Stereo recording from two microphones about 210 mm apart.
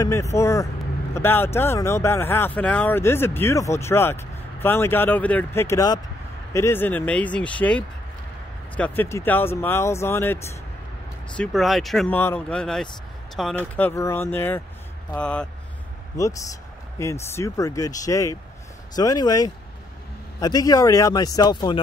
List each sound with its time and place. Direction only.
0.0 s speech: 15° left (ahead or behind)
17.0 s speech: 15° left (ahead or behind)